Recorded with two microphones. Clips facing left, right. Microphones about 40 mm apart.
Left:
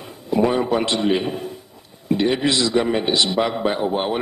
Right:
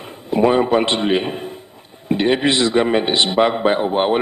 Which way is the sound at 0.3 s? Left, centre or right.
Right.